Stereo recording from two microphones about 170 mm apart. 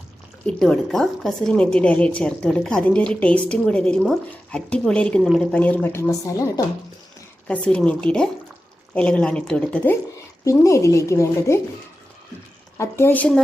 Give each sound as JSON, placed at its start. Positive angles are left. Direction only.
{"t": 0.4, "sound": "a woman's voice", "side_deg": 5}
{"t": 7.4, "sound": "a woman's voice", "side_deg": 5}
{"t": 12.7, "sound": "speech", "side_deg": 15}